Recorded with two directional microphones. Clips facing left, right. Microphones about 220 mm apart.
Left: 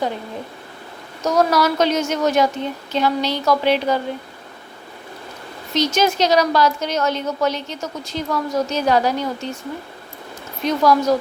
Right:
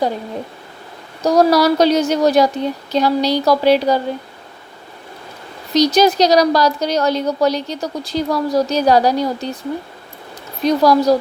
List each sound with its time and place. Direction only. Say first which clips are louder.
1.2 s a woman's voice: right 5 dB; 35° right (ahead or behind)
5.7 s a woman's voice: right 6 dB; 35° right (ahead or behind)
10.6 s a woman's voice: right 4 dB; 35° right (ahead or behind)